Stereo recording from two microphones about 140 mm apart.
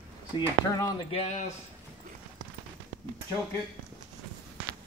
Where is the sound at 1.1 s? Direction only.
50° left (ahead or behind).